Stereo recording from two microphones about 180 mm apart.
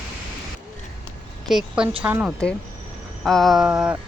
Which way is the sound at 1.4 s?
5° right (ahead or behind).